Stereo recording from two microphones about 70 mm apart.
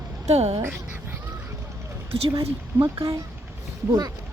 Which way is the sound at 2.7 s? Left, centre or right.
Right.